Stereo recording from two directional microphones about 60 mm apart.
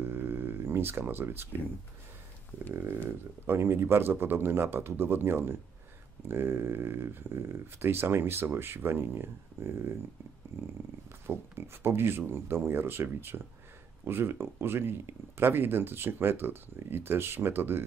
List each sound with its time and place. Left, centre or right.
0.0 s a sound: right
2.7 s speech: right
11.2 s speech: right